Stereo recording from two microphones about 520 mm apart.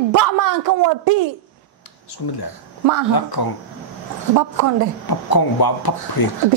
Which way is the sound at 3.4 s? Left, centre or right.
Left.